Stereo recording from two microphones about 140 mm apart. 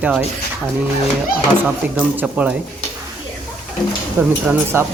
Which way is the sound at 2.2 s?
10° right (ahead or behind).